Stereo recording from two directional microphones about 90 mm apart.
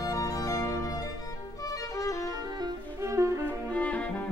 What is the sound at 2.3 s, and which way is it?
Music, 50° right (ahead or behind).